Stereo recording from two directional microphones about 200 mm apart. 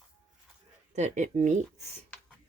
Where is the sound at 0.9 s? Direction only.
35° right (ahead or behind).